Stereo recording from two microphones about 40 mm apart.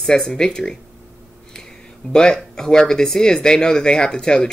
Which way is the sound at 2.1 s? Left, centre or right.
Centre.